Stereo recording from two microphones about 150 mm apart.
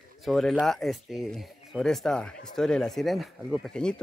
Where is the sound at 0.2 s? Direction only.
Centre (ahead or behind).